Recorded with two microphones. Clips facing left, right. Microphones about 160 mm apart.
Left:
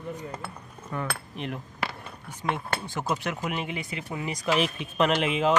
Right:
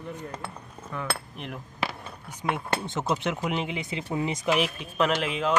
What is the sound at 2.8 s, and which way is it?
Speech, 20° right (ahead or behind).